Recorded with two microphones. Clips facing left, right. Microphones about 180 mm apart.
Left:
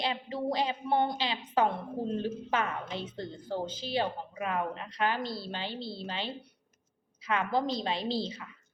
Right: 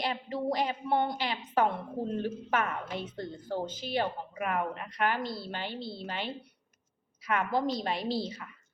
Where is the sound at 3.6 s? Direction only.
50° right (ahead or behind).